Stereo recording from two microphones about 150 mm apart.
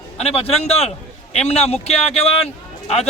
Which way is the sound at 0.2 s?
45° left (ahead or behind).